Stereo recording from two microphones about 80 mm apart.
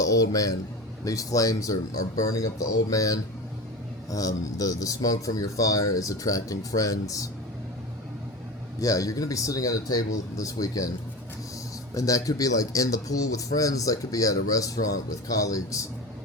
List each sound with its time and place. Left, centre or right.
0.0 s speech: left
8.8 s speech: left
11.9 s speech: left